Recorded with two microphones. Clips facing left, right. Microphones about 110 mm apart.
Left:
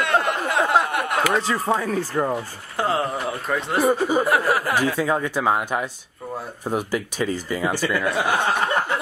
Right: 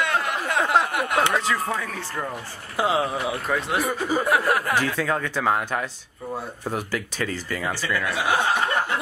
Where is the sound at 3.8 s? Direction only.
30° left (ahead or behind).